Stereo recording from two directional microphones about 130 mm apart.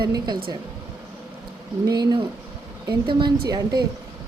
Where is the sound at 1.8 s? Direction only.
30° right (ahead or behind).